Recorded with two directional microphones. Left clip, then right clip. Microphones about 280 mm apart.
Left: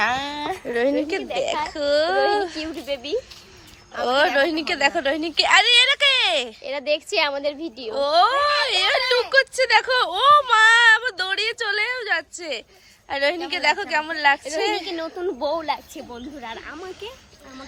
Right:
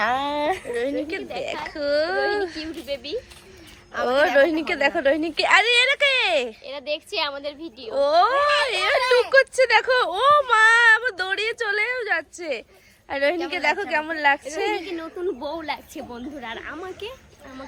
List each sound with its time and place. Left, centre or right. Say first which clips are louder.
0.2 s a sound: right 4 dB; right
0.7 s speech: left 4 dB; left
1.6 s speech: even; centre
2.8 s a woman's voice: left 3 dB; left
3.9 s speech: right 1 dB; centre
6.7 s a woman's voice: left 5 dB; left
7.9 s speech: even; centre
14.8 s speech: left 2 dB; left
16.1 s speech: even; centre